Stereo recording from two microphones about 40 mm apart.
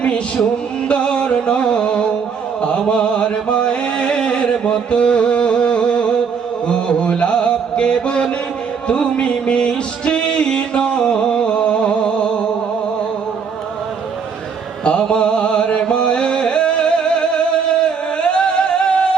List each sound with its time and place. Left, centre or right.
0.9 s music: left
2.6 s chant: left
6.7 s music: left
14.8 s music: left